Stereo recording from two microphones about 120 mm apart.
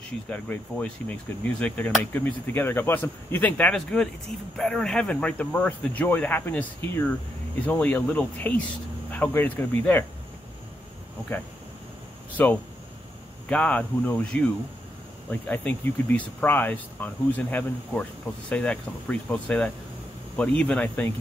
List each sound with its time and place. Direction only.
0.3 s speech: 10° left (ahead or behind)
12.4 s speech: 15° left (ahead or behind)
15.4 s speech: 15° left (ahead or behind)